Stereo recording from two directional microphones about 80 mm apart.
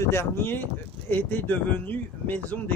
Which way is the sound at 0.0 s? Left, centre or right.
Left.